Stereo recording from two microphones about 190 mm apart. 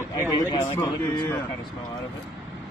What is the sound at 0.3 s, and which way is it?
Speech, 20° left (ahead or behind).